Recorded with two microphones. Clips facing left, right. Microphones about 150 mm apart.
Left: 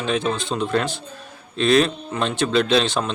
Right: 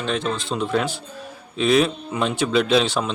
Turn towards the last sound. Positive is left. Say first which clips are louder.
# even
turn(degrees=-5)  # may be behind; listen again after turning